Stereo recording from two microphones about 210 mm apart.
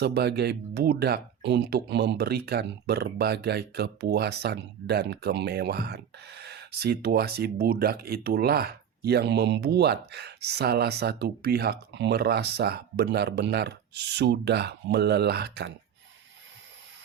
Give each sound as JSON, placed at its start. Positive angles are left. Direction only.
{"t": 0.0, "sound": "speech", "side_deg": -50}